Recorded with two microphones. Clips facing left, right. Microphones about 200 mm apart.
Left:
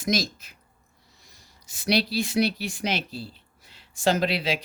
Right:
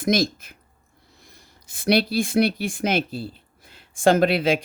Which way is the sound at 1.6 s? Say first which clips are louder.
Right 4 dB; 55° right (ahead or behind).